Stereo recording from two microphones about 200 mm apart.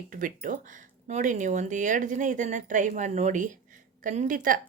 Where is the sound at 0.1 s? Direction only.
40° right (ahead or behind).